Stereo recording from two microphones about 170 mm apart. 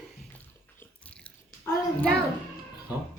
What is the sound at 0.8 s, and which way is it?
Biting, 10° left (ahead or behind).